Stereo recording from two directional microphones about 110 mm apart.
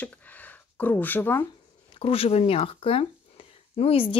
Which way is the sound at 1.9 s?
60° left (ahead or behind).